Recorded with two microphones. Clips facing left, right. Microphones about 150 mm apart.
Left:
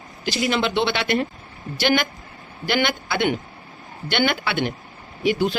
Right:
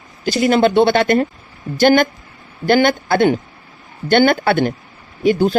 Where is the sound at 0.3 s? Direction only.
50° right (ahead or behind).